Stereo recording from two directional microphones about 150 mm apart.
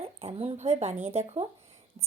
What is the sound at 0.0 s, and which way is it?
Speech, 40° right (ahead or behind).